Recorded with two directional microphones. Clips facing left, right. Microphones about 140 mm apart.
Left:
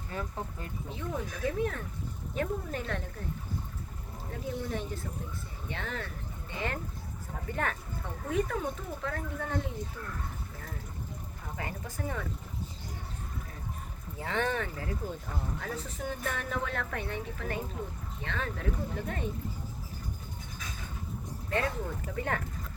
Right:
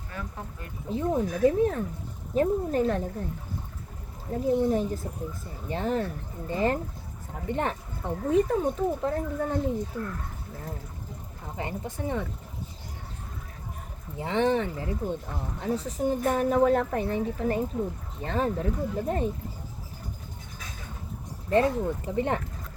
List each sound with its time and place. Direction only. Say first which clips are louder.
0.1 s speech: left 1 dB; 25° left (ahead or behind)
0.9 s speech: right 11 dB; 35° right (ahead or behind)
4.4 s speech: right 12 dB; 35° right (ahead or behind)
11.4 s speech: right 6 dB; 25° right (ahead or behind)
14.2 s speech: right 7 dB; 25° right (ahead or behind)
21.5 s speech: right 9 dB; 30° right (ahead or behind)